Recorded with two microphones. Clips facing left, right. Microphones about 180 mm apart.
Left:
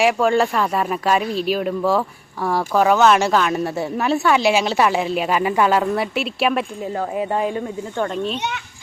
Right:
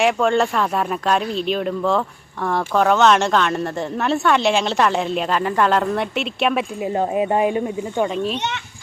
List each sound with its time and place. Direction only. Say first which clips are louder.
0.0 s speech: left 1 dB; 5° left (ahead or behind)
6.8 s speech: right 3 dB; 20° right (ahead or behind)